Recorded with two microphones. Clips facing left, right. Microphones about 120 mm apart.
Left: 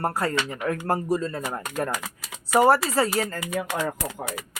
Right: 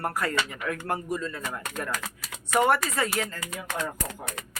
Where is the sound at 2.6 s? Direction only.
30° left (ahead or behind).